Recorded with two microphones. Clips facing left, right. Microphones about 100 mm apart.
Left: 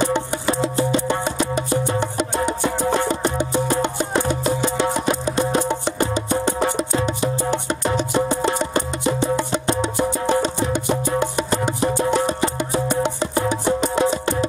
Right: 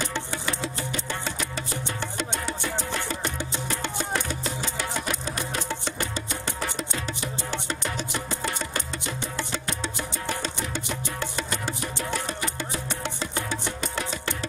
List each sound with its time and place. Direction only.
0.0 s music: 20° left (ahead or behind)
2.8 s music: 35° left (ahead or behind)
3.1 s music: 20° left (ahead or behind)